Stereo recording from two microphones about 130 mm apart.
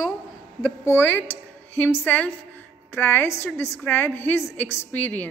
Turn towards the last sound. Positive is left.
turn(degrees=15)  # may be behind; listen again after turning